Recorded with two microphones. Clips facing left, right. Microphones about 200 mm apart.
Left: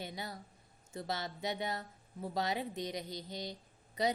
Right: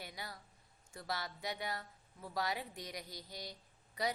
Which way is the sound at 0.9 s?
25° left (ahead or behind).